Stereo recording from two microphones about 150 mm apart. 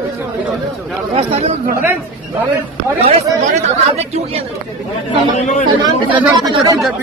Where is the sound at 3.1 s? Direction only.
45° right (ahead or behind).